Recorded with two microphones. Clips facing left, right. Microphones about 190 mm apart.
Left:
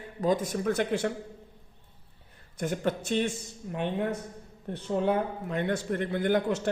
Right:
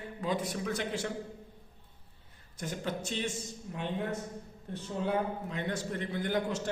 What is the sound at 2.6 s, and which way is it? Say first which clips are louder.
A man's voice: left 7 dB; 60° left (ahead or behind).